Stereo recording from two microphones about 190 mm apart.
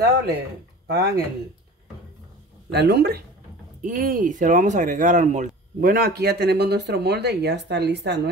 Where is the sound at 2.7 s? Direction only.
55° right (ahead or behind).